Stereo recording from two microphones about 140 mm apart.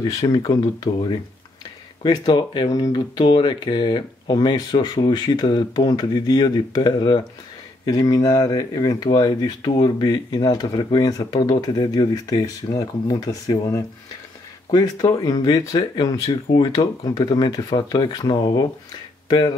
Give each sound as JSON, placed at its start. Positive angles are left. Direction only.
{"t": 0.0, "sound": "speech", "side_deg": 25}